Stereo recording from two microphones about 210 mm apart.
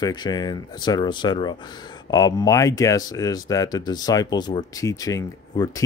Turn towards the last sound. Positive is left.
turn(degrees=15)  # may be behind; listen again after turning